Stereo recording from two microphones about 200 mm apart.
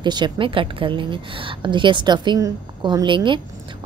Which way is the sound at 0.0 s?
20° right (ahead or behind).